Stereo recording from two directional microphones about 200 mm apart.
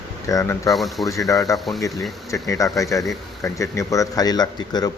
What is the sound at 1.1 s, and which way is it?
Speech, 15° left (ahead or behind).